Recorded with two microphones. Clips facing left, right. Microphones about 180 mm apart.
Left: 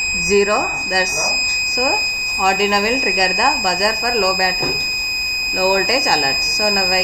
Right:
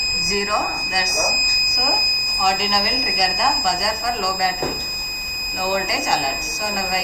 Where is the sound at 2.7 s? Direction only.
65° left (ahead or behind).